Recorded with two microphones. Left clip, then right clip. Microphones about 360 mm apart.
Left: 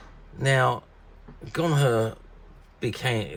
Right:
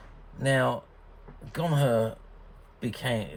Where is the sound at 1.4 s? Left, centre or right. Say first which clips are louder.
Left 4 dB; left.